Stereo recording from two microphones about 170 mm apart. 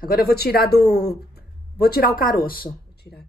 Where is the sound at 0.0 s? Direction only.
65° left (ahead or behind).